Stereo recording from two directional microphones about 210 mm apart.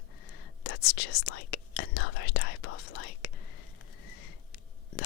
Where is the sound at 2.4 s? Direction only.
80° left.